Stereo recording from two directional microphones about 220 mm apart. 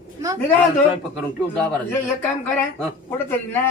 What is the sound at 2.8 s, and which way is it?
Speech, 10° left (ahead or behind).